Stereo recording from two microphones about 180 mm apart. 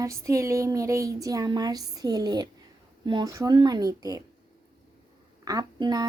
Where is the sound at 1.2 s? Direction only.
20° right (ahead or behind).